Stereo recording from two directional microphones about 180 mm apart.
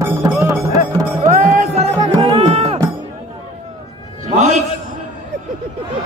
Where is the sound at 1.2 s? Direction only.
45° right (ahead or behind).